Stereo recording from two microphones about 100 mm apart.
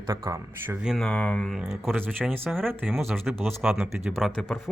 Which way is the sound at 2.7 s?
20° right (ahead or behind).